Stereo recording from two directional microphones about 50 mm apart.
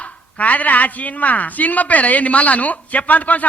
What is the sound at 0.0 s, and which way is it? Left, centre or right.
Speech, left.